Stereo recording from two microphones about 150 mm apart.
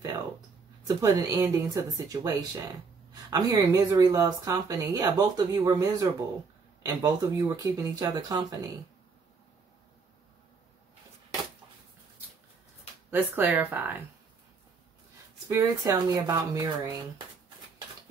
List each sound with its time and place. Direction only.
0.8 s speech: 25° right (ahead or behind)
13.1 s speech: 10° right (ahead or behind)
15.4 s speech: 20° right (ahead or behind)